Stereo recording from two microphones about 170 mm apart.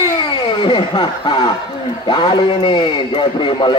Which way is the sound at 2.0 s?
30° left (ahead or behind).